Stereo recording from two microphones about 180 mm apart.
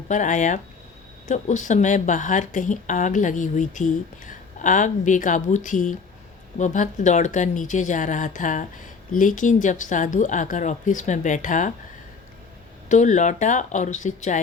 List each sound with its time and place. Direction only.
0.1 s a woman's voice: 45° left (ahead or behind)
12.9 s a woman's voice: 45° left (ahead or behind)